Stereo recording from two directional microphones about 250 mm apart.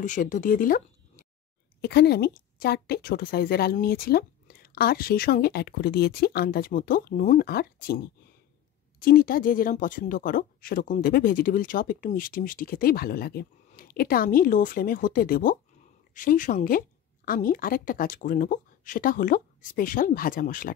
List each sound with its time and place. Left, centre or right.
0.0 s speech: left
9.0 s speech: left